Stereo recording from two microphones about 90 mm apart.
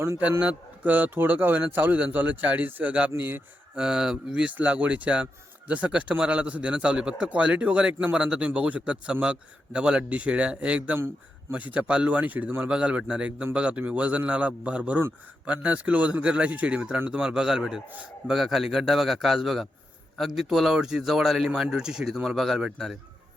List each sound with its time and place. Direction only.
0.2 s a man's voice: 15° right (ahead or behind)
3.8 s speech: 5° right (ahead or behind)